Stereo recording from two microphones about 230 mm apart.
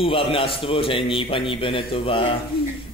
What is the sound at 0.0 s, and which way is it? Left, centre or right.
A man's voice, left.